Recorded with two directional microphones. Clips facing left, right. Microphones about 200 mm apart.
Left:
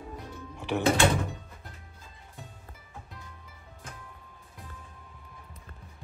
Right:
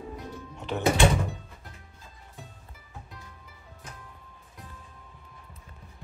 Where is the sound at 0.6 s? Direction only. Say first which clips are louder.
Left 3 dB; 10° left (ahead or behind).